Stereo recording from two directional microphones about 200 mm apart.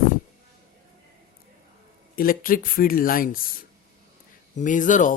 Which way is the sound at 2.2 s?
45° left (ahead or behind).